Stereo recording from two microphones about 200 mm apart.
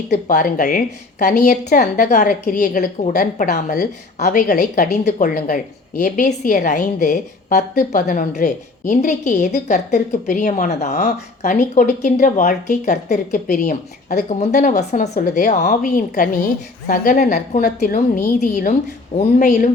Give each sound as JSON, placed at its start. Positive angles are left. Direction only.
{"t": 0.1, "sound": "a woman's voice", "side_deg": 40}
{"t": 1.4, "sound": "a woman's voice", "side_deg": 50}
{"t": 2.0, "sound": "a woman's voice", "side_deg": 35}